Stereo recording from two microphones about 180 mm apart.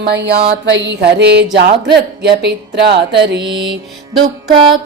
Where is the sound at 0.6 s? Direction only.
85° right.